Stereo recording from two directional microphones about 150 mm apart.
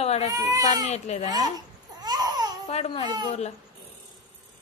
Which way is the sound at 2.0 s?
25° right (ahead or behind).